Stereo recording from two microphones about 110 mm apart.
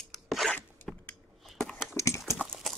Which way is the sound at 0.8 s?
5° left (ahead or behind).